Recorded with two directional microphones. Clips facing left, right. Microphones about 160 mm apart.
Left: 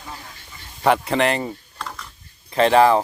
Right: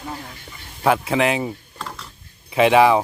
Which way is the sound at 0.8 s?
Centre (ahead or behind).